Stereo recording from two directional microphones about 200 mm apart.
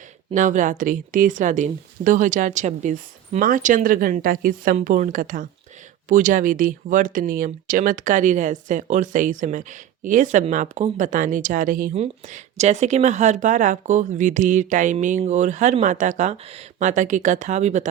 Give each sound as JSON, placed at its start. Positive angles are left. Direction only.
{"t": 0.3, "sound": "speech", "side_deg": -40}